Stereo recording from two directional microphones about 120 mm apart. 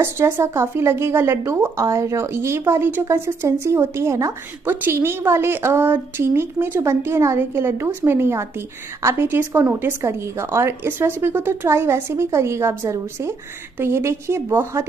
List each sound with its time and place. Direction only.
0.0 s speech: 25° right (ahead or behind)